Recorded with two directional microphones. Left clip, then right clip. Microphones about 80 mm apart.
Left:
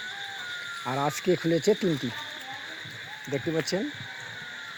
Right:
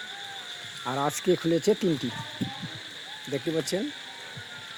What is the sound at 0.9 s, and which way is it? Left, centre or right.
Speech, right.